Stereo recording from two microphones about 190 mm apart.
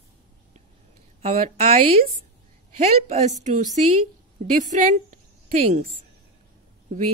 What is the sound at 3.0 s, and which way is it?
A woman's voice, 35° right (ahead or behind).